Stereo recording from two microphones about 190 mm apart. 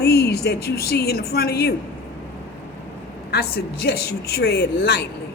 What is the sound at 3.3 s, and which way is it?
Speech, 55° left (ahead or behind).